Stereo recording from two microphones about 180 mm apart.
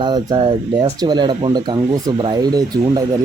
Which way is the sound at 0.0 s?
25° right (ahead or behind).